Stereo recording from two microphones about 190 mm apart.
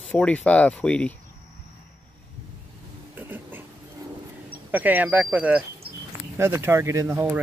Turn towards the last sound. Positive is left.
turn(degrees=-15)  # may be behind; listen again after turning